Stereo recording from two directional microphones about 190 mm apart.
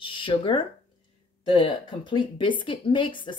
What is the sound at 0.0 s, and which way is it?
A woman's voice, 25° left (ahead or behind).